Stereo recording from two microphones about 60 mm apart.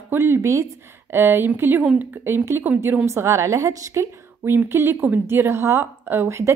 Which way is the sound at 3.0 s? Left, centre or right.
Right.